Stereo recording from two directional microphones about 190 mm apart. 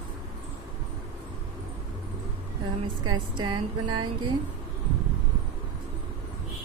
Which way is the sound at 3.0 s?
25° right (ahead or behind).